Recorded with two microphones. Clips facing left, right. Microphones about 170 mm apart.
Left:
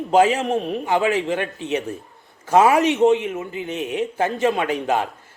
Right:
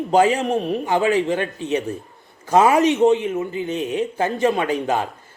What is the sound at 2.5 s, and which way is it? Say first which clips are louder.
Speech: even; 5° left (ahead or behind).